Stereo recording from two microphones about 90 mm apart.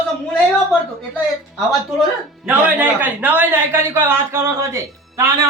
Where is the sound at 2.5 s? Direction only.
20° right (ahead or behind).